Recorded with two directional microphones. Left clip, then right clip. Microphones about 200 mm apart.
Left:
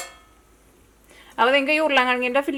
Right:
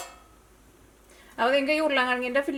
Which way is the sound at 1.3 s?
15° left (ahead or behind).